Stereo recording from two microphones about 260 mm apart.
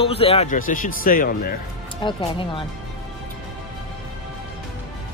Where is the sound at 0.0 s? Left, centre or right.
Left.